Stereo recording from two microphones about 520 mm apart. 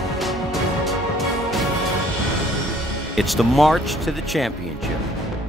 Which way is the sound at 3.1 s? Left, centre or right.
Centre.